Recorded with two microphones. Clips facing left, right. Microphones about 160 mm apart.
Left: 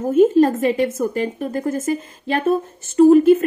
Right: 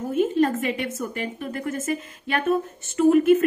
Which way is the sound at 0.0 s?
40° left (ahead or behind).